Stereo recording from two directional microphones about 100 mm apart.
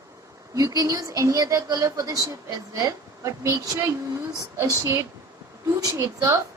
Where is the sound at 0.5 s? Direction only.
35° right (ahead or behind).